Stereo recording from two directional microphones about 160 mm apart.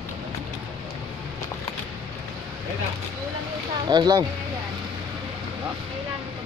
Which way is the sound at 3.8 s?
25° right (ahead or behind).